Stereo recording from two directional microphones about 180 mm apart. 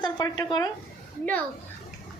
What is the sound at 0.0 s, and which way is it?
Speech, 20° left (ahead or behind).